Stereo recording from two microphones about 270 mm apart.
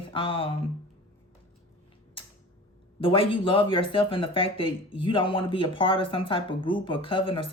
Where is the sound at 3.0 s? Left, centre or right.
Centre.